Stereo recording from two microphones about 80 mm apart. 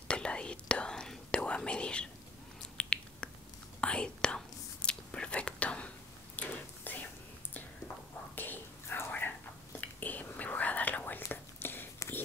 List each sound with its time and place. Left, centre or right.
0.1 s whispering: centre
2.8 s finger snapping: centre
3.8 s whispering: centre
8.4 s whispering: left